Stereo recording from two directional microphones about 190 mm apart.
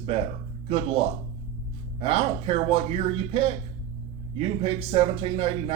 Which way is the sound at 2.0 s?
30° right (ahead or behind).